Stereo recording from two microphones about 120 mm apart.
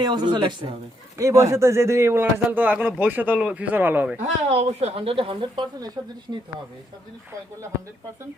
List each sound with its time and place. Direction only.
0.0 s speech: 40° right (ahead or behind)
1.2 s a man's voice: 25° right (ahead or behind)
4.4 s speech: 60° right (ahead or behind); by 5.9 s 40° right (ahead or behind)